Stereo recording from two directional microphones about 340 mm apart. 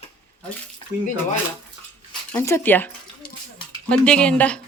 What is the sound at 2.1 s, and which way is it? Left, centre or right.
Speech, centre.